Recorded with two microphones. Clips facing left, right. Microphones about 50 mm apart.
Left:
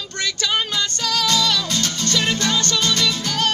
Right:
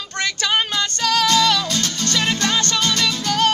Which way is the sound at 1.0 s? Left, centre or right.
Right.